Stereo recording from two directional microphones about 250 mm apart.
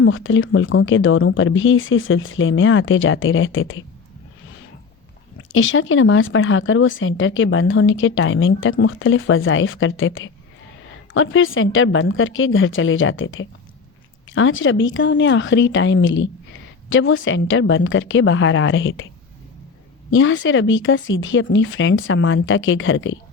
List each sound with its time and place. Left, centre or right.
0.0 s speech: left
5.5 s speech: left
20.1 s speech: left